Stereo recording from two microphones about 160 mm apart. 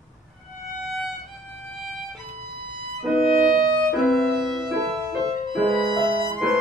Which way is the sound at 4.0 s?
Centre (ahead or behind).